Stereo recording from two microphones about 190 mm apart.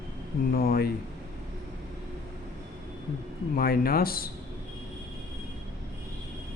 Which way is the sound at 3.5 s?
50° left (ahead or behind).